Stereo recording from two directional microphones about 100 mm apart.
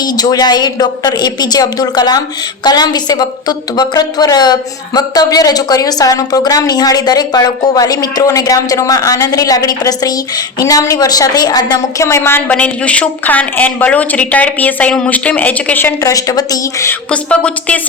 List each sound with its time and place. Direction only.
0.0 s a woman's voice: 40° left (ahead or behind)
12.0 s speech: 25° left (ahead or behind)
12.5 s speech: 15° left (ahead or behind)
16.0 s a woman's voice: 35° left (ahead or behind)
17.1 s speech: 10° left (ahead or behind)